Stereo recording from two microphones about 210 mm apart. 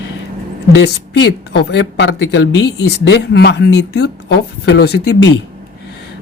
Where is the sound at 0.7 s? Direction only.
55° left (ahead or behind).